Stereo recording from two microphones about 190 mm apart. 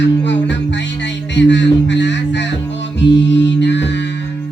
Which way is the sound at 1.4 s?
70° left (ahead or behind).